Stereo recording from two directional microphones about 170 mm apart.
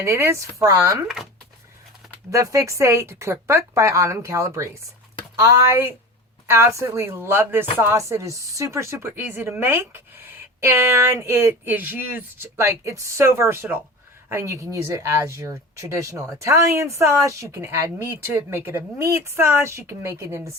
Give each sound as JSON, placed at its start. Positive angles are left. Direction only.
{"t": 0.0, "sound": "speech", "side_deg": -15}
{"t": 1.0, "sound": "speech", "side_deg": -5}
{"t": 2.3, "sound": "speech", "side_deg": -20}